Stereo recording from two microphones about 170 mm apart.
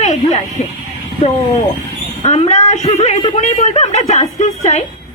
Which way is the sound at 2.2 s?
40° left (ahead or behind).